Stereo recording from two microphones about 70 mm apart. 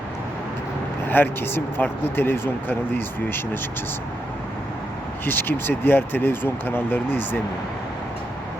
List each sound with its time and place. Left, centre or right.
1.0 s speech: left
5.2 s speech: left